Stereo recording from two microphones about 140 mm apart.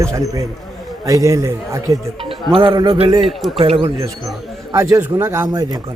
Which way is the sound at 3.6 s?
40° right (ahead or behind).